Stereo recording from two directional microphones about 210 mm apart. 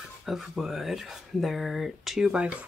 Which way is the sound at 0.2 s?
Centre (ahead or behind).